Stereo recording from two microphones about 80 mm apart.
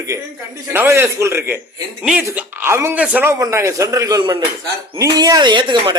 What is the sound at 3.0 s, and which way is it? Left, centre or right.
Speech, centre.